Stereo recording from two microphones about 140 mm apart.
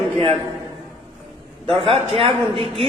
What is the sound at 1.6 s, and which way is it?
A man's voice, 40° right (ahead or behind).